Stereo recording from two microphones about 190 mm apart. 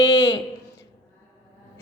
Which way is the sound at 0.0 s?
25° left (ahead or behind).